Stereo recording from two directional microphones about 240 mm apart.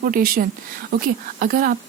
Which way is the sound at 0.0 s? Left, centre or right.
Right.